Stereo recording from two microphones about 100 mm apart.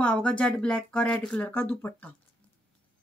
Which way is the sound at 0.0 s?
15° left (ahead or behind).